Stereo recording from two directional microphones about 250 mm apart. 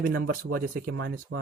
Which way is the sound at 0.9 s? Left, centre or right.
Right.